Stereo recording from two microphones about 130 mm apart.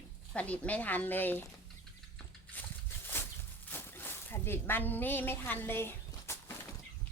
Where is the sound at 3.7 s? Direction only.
15° left (ahead or behind).